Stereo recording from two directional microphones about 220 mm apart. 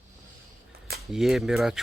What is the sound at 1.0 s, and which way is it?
Speech, centre (ahead or behind).